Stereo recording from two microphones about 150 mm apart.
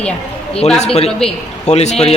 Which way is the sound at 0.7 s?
45° left (ahead or behind).